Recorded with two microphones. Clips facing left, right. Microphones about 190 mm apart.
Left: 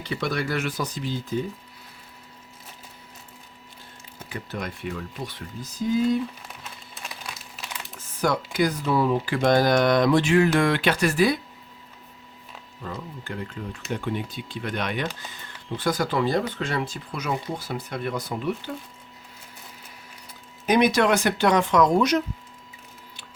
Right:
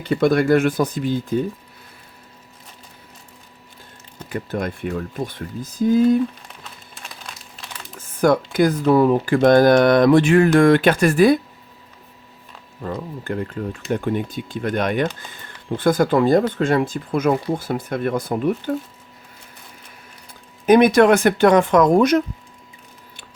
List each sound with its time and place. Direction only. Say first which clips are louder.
0.0 s speech: right 11 dB; 50° right (ahead or behind)
4.3 s speech: right 8 dB; 50° right (ahead or behind)
7.9 s computer keyboard: right 8 dB; 50° right (ahead or behind)
8.5 s speech: right 7 dB; 50° right (ahead or behind)
12.8 s speech: right 8 dB; 50° right (ahead or behind)
20.7 s speech: right 7 dB; 50° right (ahead or behind)